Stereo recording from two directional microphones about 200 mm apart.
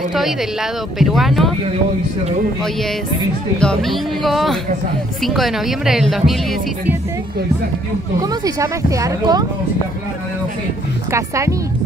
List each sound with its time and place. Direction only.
0.1 s speech: centre (ahead or behind)
3.5 s speech: 5° left (ahead or behind)
8.2 s speech: 20° right (ahead or behind)
11.1 s speech: 15° right (ahead or behind)